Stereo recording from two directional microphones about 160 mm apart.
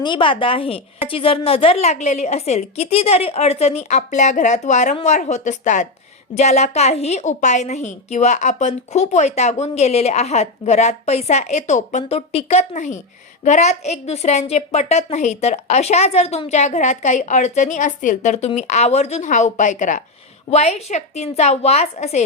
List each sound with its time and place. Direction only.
0.0 s a woman's voice: 30° left (ahead or behind)